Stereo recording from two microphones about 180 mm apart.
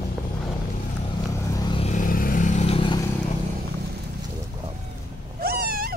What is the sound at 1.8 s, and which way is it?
Vehicle, 45° left (ahead or behind).